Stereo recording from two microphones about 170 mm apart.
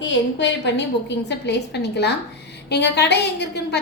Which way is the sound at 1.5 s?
80° left.